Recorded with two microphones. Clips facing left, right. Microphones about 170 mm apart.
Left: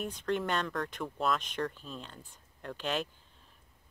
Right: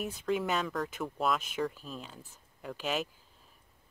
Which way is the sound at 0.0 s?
5° right (ahead or behind).